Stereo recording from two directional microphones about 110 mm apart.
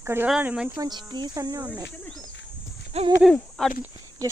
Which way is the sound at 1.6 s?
15° right (ahead or behind).